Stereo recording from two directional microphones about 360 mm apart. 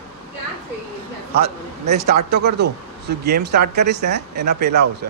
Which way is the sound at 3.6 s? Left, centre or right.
Right.